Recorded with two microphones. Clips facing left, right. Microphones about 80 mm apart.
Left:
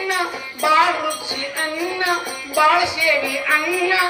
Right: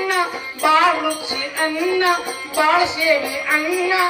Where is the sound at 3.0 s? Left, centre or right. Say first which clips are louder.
Right 1 dB; right.